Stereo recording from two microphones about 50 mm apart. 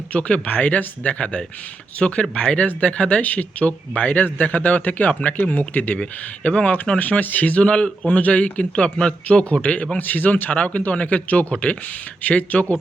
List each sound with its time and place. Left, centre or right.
0.1 s speech: left
6.0 s speech: left
10.0 s a man's voice: left
10.5 s speech: left